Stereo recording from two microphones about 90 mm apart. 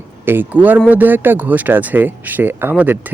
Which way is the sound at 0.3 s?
20° right (ahead or behind).